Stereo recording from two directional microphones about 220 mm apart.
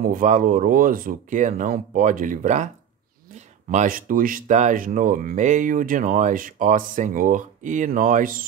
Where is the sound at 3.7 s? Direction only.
35° right (ahead or behind).